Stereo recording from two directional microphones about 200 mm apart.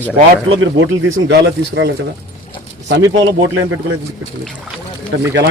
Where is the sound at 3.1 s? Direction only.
70° right (ahead or behind); by 3.9 s 85° right.